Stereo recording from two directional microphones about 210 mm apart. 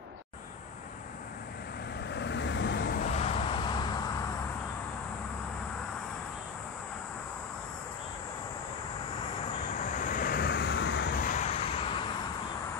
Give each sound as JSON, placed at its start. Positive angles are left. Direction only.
{"t": 2.0, "sound": "vehicle", "side_deg": 55}
{"t": 3.0, "sound": "vehicle", "side_deg": 30}
{"t": 9.8, "sound": "vehicle", "side_deg": 40}